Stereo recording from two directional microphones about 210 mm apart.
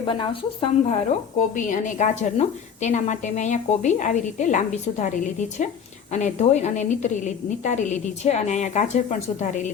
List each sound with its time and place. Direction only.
0.1 s a woman's voice: 25° left (ahead or behind)
1.5 s a woman's voice: 35° left (ahead or behind)